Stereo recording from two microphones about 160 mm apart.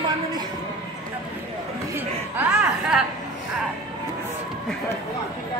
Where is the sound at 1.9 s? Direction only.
5° right (ahead or behind).